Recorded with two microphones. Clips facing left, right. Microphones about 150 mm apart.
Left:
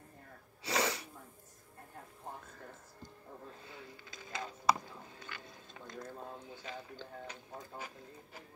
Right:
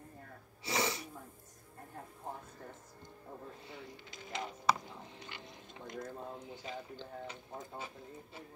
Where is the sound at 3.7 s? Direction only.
20° right (ahead or behind).